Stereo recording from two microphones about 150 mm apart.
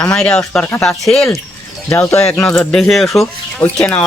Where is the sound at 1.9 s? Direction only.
15° left (ahead or behind).